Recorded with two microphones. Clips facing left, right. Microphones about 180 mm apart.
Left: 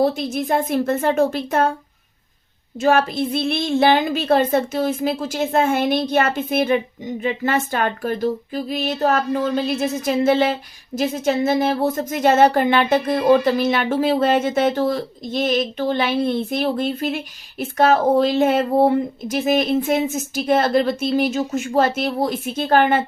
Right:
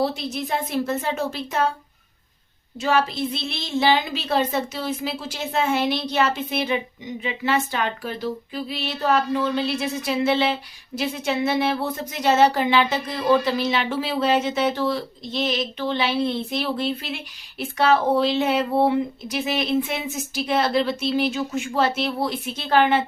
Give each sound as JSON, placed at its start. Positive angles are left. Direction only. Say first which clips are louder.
{"t": 0.0, "sound": "a woman's voice", "louder": "left 5 dB", "side_deg": 50}
{"t": 2.7, "sound": "a woman's voice", "louder": "left 5 dB", "side_deg": 50}